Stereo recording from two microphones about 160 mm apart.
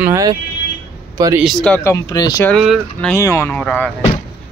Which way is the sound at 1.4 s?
5° left (ahead or behind).